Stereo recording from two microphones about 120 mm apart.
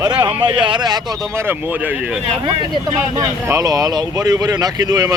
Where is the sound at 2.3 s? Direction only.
40° right (ahead or behind).